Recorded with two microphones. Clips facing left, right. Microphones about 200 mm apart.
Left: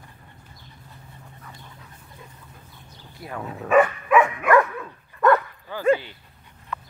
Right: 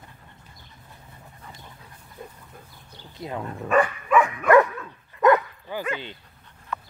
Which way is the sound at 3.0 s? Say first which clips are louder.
Right 2 dB; 20° right (ahead or behind).